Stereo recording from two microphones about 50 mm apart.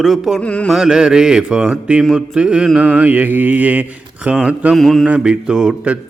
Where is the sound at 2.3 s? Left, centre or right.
Centre.